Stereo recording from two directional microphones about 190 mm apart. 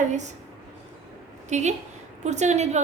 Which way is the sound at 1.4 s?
40° right (ahead or behind).